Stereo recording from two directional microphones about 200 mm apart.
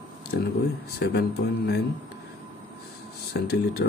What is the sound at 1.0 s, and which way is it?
Speech, 50° left (ahead or behind).